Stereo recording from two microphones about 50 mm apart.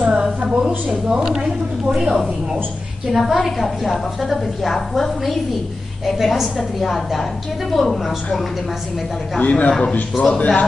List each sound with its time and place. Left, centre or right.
0.1 s a woman's voice: centre
9.4 s a man's voice: left
10.1 s speech: centre